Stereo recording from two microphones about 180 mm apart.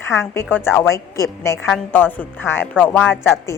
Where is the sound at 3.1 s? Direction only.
5° right (ahead or behind).